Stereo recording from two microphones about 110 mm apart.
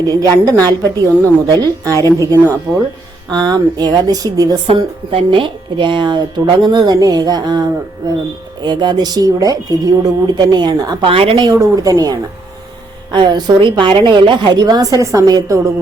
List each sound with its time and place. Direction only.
0.1 s a woman's voice: 35° right (ahead or behind)
2.7 s speech: 15° right (ahead or behind)
3.3 s a woman's voice: 40° right (ahead or behind)
4.7 s a woman's voice: 50° right (ahead or behind)
11.0 s a woman's voice: 55° right (ahead or behind)
11.5 s a woman's voice: 35° right (ahead or behind)